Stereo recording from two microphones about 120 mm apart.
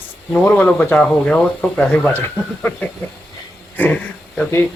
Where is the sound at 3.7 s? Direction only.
15° left (ahead or behind).